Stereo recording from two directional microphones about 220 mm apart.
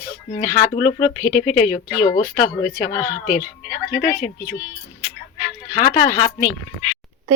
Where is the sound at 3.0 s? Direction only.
5° right (ahead or behind).